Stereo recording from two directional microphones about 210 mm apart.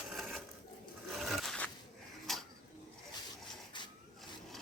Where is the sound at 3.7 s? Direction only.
20° left (ahead or behind).